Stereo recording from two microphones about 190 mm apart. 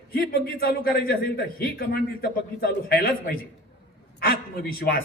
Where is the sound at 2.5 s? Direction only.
50° left (ahead or behind).